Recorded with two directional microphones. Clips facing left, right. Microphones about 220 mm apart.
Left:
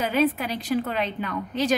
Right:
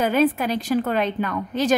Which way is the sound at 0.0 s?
50° right (ahead or behind).